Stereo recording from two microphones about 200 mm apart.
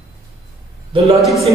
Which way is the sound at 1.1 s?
Centre (ahead or behind).